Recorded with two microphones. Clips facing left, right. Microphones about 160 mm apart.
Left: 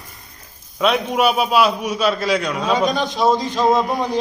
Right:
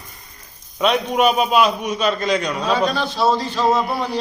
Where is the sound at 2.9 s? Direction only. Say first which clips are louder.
Left 1 dB; 15° left (ahead or behind).